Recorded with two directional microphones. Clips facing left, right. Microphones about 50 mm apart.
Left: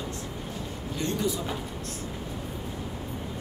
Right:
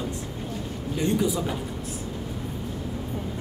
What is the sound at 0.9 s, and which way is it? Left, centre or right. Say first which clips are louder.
Speech: right 5 dB; centre.